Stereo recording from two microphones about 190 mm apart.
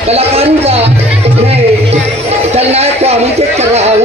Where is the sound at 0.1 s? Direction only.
30° right (ahead or behind).